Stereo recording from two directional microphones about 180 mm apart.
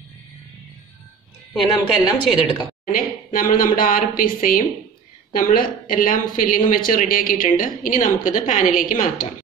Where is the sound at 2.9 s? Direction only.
50° left (ahead or behind).